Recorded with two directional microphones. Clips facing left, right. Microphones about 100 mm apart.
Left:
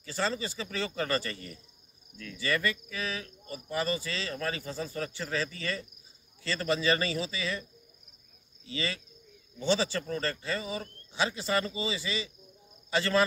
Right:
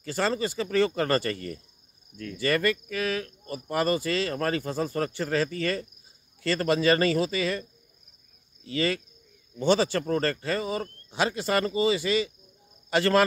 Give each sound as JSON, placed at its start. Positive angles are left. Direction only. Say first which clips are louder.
{"t": 0.0, "sound": "speech", "louder": "right 5 dB", "side_deg": -55}
{"t": 8.6, "sound": "speech", "louder": "right 8 dB", "side_deg": -50}